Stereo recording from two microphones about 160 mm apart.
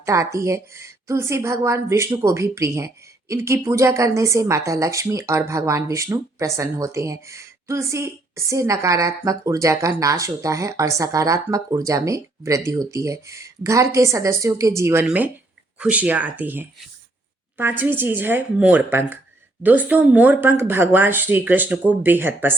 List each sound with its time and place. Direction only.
0.0 s a woman's voice: 20° right (ahead or behind)